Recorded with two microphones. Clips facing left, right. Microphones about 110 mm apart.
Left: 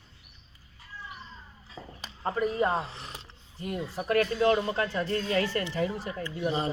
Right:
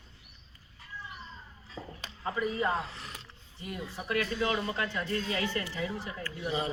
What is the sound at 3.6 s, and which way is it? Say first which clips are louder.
A man's voice: left 6 dB; 45° left (ahead or behind).